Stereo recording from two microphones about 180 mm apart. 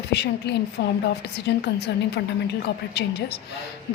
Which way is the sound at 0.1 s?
70° left (ahead or behind).